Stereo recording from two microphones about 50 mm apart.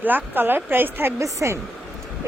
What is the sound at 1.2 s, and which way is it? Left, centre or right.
Speech, right.